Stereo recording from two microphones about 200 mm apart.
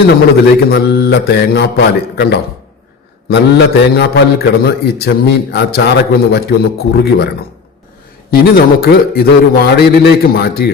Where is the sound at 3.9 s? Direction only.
55° left (ahead or behind).